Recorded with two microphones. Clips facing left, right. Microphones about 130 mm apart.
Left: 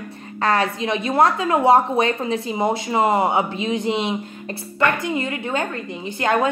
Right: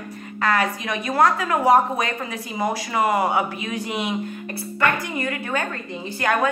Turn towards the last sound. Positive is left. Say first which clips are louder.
# left 2 dB
turn(degrees=25)  # may be behind; listen again after turning